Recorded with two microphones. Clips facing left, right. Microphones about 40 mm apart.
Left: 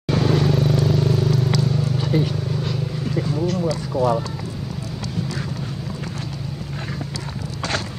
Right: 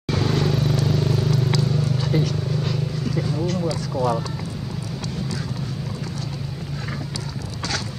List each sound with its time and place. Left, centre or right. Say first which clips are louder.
0.1 s vehicle: left 3 dB; centre
3.9 s speech: left 3 dB; centre